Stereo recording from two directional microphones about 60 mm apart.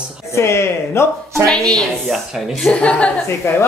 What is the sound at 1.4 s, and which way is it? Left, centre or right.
Speech, centre.